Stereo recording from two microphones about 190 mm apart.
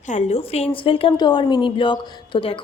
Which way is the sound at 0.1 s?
35° left (ahead or behind).